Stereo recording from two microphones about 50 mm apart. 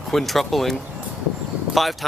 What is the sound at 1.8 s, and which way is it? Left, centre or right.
Speech, centre.